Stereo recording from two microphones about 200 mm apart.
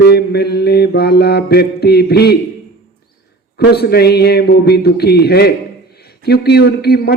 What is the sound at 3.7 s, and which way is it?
A man's voice, 55° left (ahead or behind).